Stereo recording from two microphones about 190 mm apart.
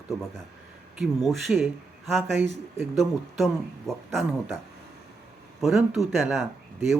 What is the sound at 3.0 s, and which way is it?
Speech, centre (ahead or behind).